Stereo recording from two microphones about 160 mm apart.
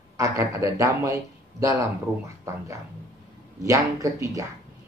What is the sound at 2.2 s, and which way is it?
A man's voice, 20° right (ahead or behind).